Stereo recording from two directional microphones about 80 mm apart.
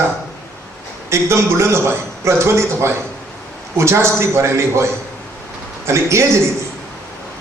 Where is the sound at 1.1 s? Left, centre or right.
Right.